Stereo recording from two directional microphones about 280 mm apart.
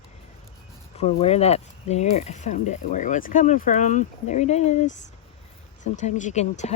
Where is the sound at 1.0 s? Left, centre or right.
Left.